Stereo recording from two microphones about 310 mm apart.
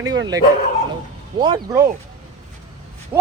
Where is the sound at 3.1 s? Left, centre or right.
Centre.